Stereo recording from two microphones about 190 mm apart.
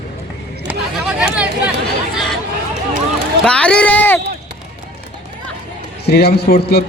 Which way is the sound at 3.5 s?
5° left (ahead or behind).